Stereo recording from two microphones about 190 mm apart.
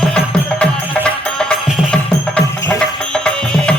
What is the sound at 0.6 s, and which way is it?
Music, 5° left (ahead or behind).